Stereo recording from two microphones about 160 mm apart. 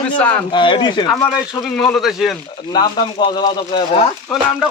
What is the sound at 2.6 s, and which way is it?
Speech, 25° left (ahead or behind).